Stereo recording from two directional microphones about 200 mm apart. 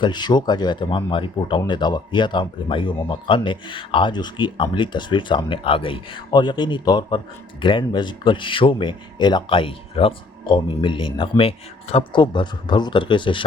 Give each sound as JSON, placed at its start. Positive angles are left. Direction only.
{"t": 0.0, "sound": "speech", "side_deg": 20}